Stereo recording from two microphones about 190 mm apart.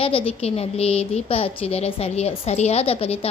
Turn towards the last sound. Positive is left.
turn(degrees=30)  # may be behind; listen again after turning